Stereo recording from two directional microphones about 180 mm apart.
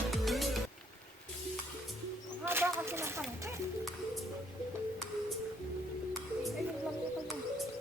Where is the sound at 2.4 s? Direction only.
10° right (ahead or behind).